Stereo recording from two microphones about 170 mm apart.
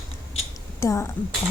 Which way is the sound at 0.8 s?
15° left (ahead or behind).